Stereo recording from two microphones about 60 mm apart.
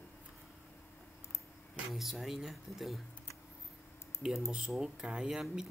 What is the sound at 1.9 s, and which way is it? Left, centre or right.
Speech, centre.